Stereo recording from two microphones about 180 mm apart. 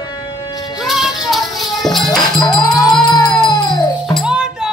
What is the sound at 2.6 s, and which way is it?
Music, 20° left (ahead or behind).